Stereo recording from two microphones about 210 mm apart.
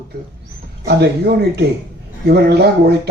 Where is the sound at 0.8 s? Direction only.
50° right (ahead or behind).